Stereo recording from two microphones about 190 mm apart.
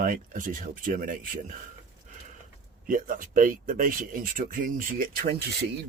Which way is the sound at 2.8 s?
45° right (ahead or behind).